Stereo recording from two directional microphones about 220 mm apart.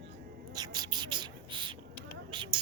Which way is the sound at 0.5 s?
20° right (ahead or behind).